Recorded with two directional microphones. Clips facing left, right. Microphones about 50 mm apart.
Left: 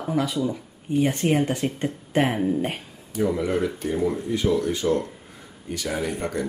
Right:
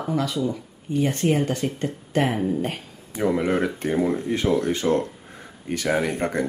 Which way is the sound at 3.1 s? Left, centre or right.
Right.